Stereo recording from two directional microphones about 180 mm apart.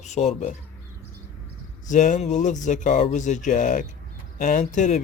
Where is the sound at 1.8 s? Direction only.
45° left (ahead or behind).